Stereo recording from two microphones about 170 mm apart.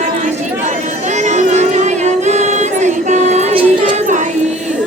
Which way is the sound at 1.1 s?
45° right (ahead or behind).